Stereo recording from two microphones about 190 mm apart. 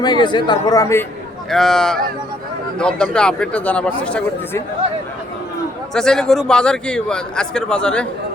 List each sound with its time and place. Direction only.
0.0 s speech: 25° left (ahead or behind)
1.5 s a man's voice: centre (ahead or behind)
5.9 s a man's voice: 5° left (ahead or behind)